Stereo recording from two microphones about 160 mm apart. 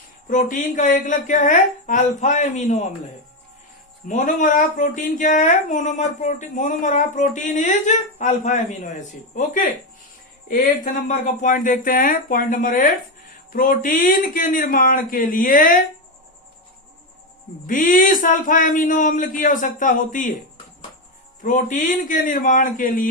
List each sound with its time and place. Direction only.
0.3 s speech: 55° left (ahead or behind)
4.1 s a man's voice: 55° left (ahead or behind)
17.7 s a man's voice: 55° left (ahead or behind)
21.4 s a man's voice: 55° left (ahead or behind)